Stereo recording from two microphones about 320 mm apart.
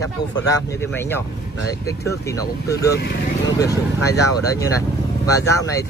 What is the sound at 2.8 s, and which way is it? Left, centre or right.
Speech, left.